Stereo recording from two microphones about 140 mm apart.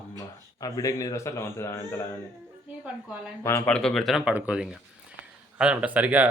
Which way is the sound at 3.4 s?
15° left (ahead or behind).